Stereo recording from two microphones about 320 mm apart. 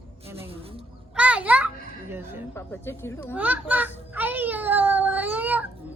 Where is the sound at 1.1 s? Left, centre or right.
Centre.